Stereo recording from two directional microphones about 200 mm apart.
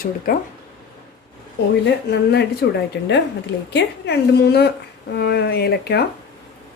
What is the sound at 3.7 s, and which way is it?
Speech, 55° left (ahead or behind).